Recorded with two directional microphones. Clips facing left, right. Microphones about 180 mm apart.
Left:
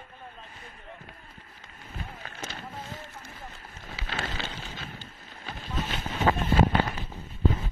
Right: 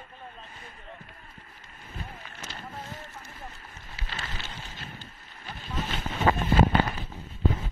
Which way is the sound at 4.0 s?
80° left.